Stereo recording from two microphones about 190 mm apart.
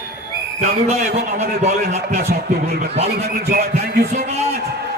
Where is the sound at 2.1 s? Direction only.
55° right (ahead or behind).